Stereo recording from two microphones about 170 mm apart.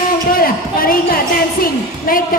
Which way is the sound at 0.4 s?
60° left (ahead or behind).